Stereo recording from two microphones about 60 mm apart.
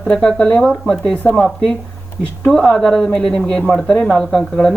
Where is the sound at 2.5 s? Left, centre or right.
Centre.